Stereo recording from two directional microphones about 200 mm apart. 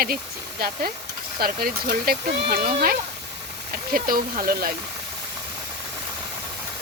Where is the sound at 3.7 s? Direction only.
45° right (ahead or behind).